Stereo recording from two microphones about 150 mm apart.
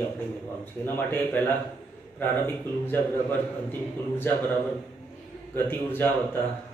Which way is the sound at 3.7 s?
10° left (ahead or behind).